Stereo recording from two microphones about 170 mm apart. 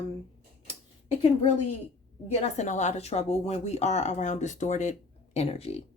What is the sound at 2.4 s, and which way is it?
Speech, 45° left (ahead or behind).